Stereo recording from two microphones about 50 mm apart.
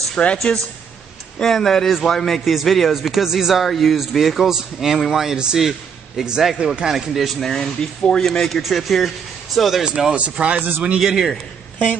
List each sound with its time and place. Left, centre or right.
0.2 s speech: left
1.4 s a man's voice: centre
7.2 s a man's voice: centre
9.8 s speech: centre
11.0 s a man's voice: centre